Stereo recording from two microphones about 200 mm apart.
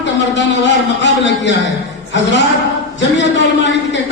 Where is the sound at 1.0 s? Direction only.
65° left (ahead or behind).